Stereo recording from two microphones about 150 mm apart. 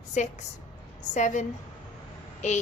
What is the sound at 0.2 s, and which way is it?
A woman's voice, 55° left (ahead or behind).